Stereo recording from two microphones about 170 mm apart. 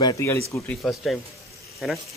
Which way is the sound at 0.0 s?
20° left (ahead or behind).